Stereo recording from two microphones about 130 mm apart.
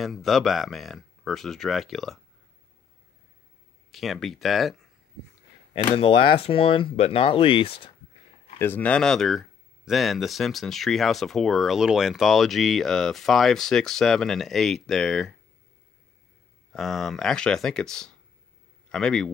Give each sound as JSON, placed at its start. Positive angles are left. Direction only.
{"t": 0.0, "sound": "speech", "side_deg": 0}
{"t": 3.9, "sound": "speech", "side_deg": 0}
{"t": 5.7, "sound": "speech", "side_deg": 45}
{"t": 8.5, "sound": "speech", "side_deg": 15}
{"t": 16.7, "sound": "a man's voice", "side_deg": 0}